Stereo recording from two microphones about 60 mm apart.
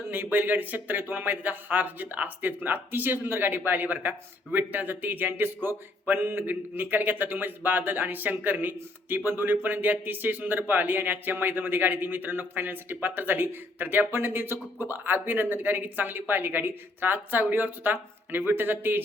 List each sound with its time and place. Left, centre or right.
0.1 s speech: right